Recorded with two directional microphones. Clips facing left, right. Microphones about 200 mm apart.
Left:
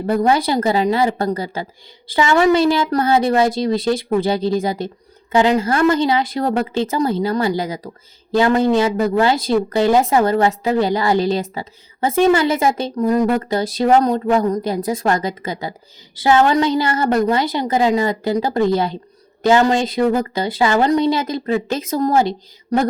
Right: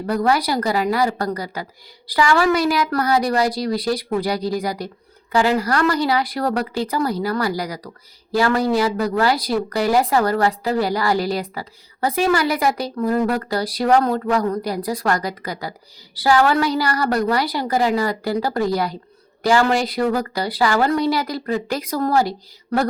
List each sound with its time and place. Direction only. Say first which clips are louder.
0.0 s a woman's voice: left 3 dB; 25° left (ahead or behind)